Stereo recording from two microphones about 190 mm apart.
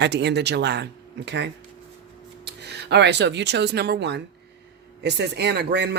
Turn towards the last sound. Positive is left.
turn(degrees=-65)  # may be behind; listen again after turning